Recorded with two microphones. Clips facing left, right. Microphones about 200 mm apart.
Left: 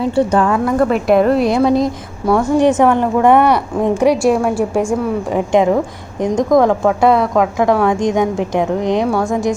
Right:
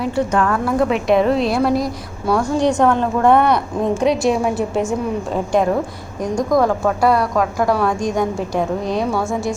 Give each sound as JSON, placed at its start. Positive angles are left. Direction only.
{"t": 0.0, "sound": "a woman's voice", "side_deg": 30}
{"t": 0.6, "sound": "a woman's voice", "side_deg": 0}
{"t": 1.7, "sound": "a woman's voice", "side_deg": 20}